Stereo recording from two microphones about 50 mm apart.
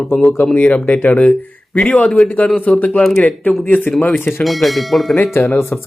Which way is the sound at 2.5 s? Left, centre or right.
Left.